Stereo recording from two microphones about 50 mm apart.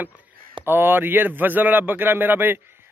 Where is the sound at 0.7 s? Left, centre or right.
Right.